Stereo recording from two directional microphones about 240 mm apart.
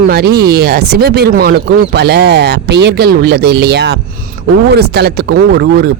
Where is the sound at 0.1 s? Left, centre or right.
Right.